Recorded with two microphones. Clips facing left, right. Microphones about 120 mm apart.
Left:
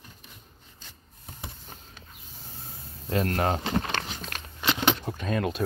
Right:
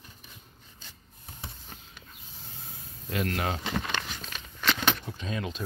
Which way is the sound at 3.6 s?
20° left (ahead or behind).